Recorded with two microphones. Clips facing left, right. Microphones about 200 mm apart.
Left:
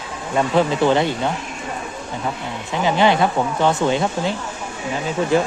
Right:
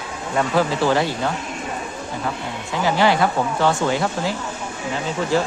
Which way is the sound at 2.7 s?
20° left (ahead or behind).